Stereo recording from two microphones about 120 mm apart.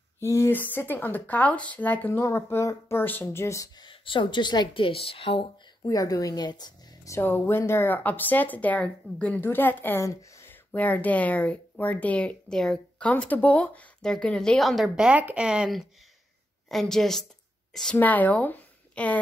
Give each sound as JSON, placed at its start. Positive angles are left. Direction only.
{"t": 0.2, "sound": "speech", "side_deg": 25}
{"t": 5.9, "sound": "speech", "side_deg": 30}
{"t": 7.2, "sound": "a woman's voice", "side_deg": 20}
{"t": 17.9, "sound": "speech", "side_deg": 15}